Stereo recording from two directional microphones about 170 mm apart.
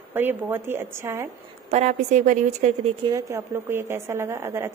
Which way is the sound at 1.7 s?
40° right (ahead or behind).